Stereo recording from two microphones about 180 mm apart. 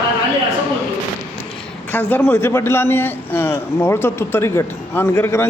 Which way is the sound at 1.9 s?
10° left (ahead or behind).